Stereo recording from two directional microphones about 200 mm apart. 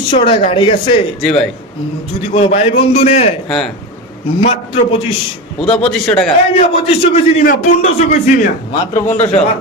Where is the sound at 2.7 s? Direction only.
30° left (ahead or behind).